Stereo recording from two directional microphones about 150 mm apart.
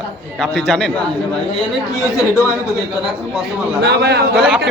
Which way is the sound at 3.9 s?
90° right.